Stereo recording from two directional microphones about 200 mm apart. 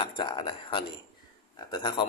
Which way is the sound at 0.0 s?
25° left (ahead or behind).